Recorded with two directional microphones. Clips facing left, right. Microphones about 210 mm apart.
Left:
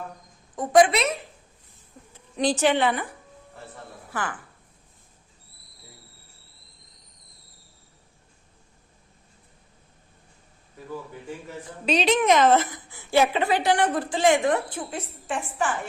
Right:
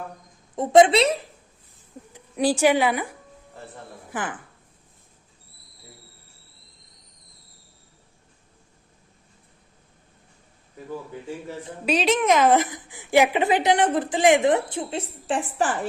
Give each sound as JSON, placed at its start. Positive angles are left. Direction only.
{"t": 0.5, "sound": "a woman's voice", "side_deg": -25}
{"t": 2.1, "sound": "a woman's voice", "side_deg": -10}
{"t": 4.1, "sound": "a woman's voice", "side_deg": -20}
{"t": 11.9, "sound": "a woman's voice", "side_deg": -5}